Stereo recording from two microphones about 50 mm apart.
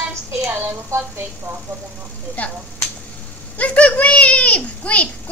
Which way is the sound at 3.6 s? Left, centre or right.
Left.